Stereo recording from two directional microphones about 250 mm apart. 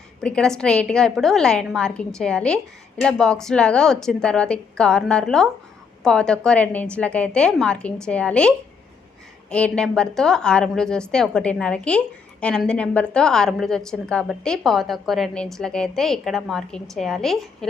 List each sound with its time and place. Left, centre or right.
0.2 s a woman's voice: centre